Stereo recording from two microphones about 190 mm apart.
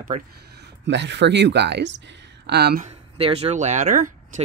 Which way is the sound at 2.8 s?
30° right (ahead or behind).